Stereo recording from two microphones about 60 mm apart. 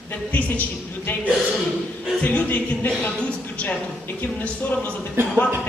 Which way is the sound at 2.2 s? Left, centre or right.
Left.